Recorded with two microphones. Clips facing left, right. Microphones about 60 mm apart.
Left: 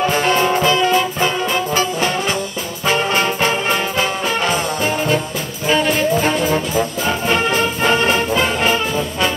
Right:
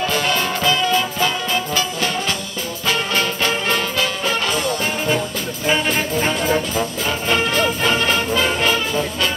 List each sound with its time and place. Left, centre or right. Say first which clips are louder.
0.0 s music: left 4 dB; left
2.9 s brass instrument: left 4 dB; left
3.9 s music: left 2 dB; left
5.7 s music: left 4 dB; centre
6.7 s music: left 3 dB; centre
7.9 s music: left 3 dB; left